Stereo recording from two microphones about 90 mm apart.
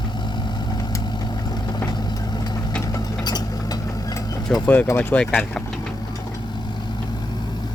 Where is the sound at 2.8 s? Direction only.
45° left (ahead or behind).